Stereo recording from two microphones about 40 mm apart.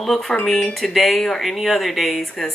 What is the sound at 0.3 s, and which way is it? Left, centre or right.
Speech, centre.